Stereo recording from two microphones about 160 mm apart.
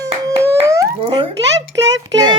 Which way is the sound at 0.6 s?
20° right (ahead or behind).